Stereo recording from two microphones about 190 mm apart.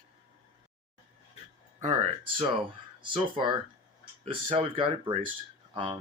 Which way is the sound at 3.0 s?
25° right (ahead or behind).